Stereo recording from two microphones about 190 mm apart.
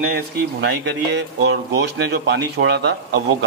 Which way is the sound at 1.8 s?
65° right (ahead or behind).